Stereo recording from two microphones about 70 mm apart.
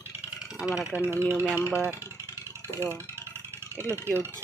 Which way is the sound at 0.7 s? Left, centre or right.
Centre.